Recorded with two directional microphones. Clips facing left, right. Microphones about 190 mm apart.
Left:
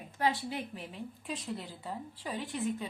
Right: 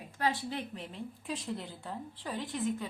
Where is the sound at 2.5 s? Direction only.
15° left (ahead or behind).